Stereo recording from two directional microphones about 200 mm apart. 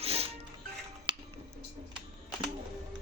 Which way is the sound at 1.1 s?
25° right (ahead or behind).